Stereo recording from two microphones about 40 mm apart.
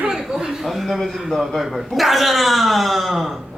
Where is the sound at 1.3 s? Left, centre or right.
Centre.